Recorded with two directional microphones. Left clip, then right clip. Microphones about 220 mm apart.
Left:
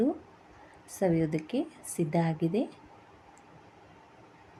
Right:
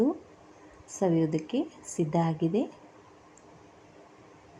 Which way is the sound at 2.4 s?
30° left (ahead or behind).